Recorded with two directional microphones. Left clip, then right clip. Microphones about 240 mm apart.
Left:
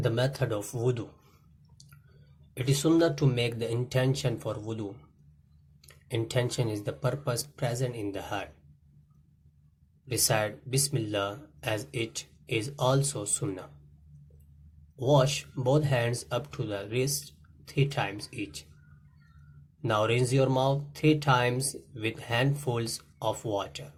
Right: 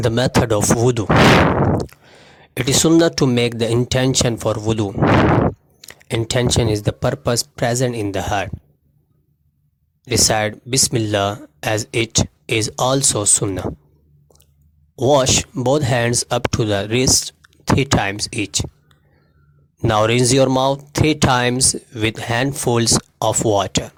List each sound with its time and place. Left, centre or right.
0.0 s speech: right
2.6 s speech: right
10.1 s speech: right
14.9 s speech: right
19.8 s speech: right